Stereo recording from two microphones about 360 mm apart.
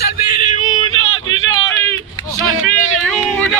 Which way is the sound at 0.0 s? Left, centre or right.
Left.